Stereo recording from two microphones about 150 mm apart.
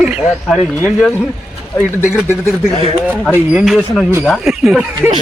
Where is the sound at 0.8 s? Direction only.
10° left (ahead or behind).